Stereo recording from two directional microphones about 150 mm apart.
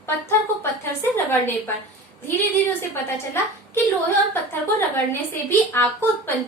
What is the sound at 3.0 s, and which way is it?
A woman's voice, 15° left (ahead or behind).